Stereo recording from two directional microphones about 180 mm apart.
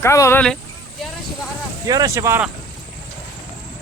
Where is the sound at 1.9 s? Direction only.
20° right (ahead or behind).